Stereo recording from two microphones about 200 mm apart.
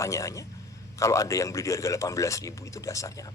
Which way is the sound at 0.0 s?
15° left (ahead or behind).